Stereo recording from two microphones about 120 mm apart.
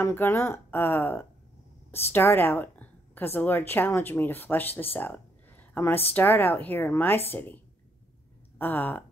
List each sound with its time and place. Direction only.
0.0 s a woman's voice: 20° left (ahead or behind)